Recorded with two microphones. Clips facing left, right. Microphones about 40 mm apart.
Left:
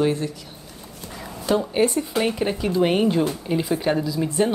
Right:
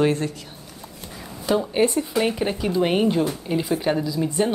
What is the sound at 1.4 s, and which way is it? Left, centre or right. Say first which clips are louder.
Speech: even; centre.